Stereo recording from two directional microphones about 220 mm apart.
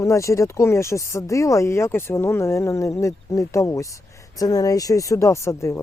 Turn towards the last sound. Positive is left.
turn(degrees=10)  # may be behind; listen again after turning